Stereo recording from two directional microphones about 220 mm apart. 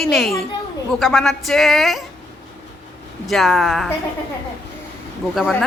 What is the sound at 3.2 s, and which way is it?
Speech, centre (ahead or behind).